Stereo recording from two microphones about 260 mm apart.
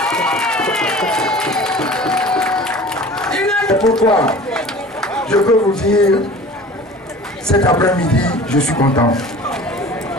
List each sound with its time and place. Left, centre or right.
0.0 s run: centre
5.8 s speech: centre
7.5 s speech: centre
8.0 s speech: centre
8.8 s speech: centre
9.1 s a sound: centre